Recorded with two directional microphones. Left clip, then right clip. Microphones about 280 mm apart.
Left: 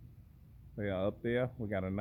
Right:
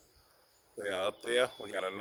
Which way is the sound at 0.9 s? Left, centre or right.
Centre.